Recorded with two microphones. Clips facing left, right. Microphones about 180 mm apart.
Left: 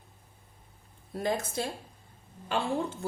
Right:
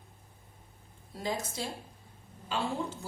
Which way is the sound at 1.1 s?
55° left (ahead or behind).